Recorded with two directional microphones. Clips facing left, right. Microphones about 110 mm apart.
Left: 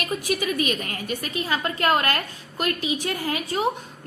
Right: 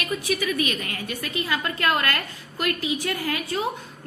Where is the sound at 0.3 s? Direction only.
40° left (ahead or behind).